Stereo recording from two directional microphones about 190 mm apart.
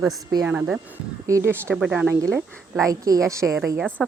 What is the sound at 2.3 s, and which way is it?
Speech, 15° right (ahead or behind).